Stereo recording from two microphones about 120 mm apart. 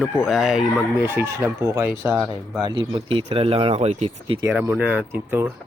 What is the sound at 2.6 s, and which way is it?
Speech, 35° right (ahead or behind).